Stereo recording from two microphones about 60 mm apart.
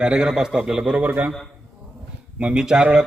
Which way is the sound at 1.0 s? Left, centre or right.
Right.